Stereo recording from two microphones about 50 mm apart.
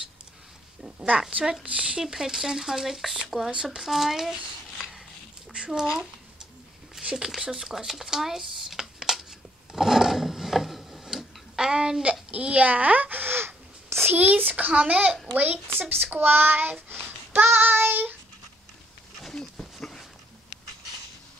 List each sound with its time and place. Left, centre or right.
0.8 s a child's voice: right
1.4 s speech: centre
3.6 s speech: centre
5.7 s speech: centre
7.0 s a sound: right
7.2 s speech: centre
9.7 s rub: centre; by 14.1 s right
14.1 s a child's voice: right
17.3 s child singing: right
19.6 s dog: centre